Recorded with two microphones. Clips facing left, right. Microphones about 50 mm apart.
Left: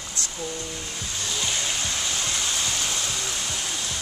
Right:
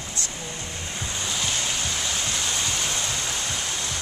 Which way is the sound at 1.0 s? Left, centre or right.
Right.